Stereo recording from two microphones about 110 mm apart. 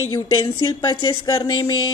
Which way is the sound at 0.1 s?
50° left (ahead or behind).